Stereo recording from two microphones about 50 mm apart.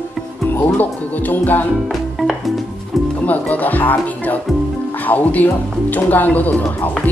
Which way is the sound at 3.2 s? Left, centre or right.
Left.